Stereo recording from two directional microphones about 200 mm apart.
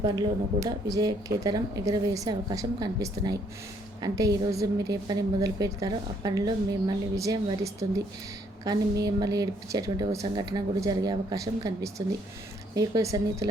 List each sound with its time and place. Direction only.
0.0 s a woman's voice: 20° right (ahead or behind)